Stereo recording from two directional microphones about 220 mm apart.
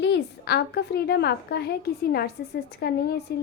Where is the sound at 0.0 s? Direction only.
50° left (ahead or behind).